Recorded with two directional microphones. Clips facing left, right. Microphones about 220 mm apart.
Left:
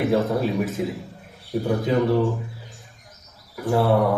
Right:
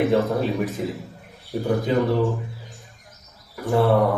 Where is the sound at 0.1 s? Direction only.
Centre (ahead or behind).